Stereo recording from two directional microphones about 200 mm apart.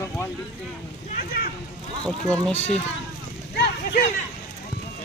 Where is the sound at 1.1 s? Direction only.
45° left (ahead or behind).